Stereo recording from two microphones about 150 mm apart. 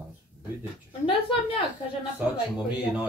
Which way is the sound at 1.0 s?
35° left (ahead or behind).